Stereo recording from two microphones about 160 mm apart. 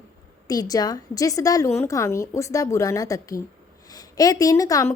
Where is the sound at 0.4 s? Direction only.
25° left (ahead or behind).